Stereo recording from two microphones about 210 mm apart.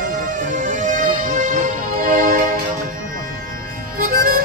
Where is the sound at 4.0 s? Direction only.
40° right (ahead or behind).